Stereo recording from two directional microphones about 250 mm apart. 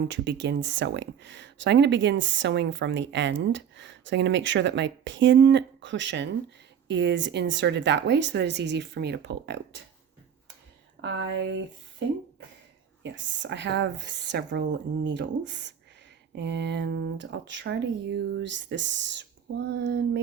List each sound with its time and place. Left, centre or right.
0.0 s speech: right
11.0 s speech: right